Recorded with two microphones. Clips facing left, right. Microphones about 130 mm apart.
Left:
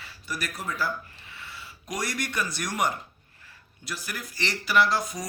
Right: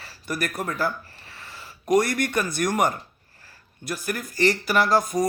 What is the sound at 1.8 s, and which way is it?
Speech, 55° right (ahead or behind).